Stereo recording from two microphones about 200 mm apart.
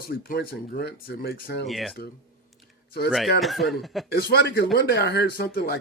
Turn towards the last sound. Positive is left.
turn(degrees=50)  # may be behind; listen again after turning